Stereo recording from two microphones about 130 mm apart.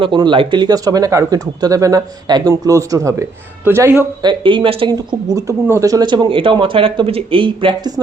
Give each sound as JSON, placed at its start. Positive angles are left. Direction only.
{"t": 0.0, "sound": "speech", "side_deg": -40}
{"t": 4.2, "sound": "speech", "side_deg": -35}
{"t": 4.9, "sound": "speech", "side_deg": -25}